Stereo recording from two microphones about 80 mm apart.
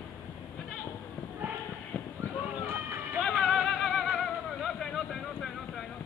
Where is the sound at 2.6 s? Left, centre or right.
Right.